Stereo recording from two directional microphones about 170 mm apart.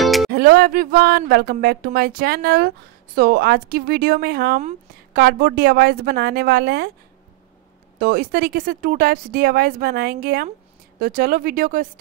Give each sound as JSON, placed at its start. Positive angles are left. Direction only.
{"t": 0.0, "sound": "music", "side_deg": 0}
{"t": 0.3, "sound": "speech", "side_deg": -60}
{"t": 8.0, "sound": "speech", "side_deg": -60}